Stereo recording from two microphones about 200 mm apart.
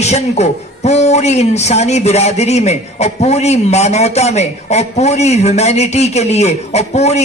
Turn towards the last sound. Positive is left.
turn(degrees=35)  # may be behind; listen again after turning